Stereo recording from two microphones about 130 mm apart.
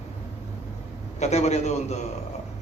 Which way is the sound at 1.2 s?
60° left (ahead or behind).